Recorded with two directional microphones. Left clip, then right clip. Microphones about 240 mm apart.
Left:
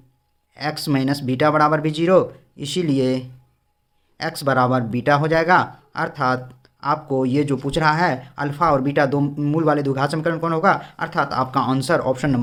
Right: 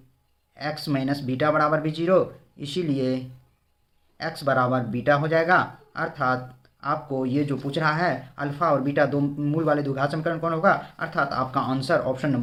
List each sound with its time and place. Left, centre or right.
0.5 s speech: left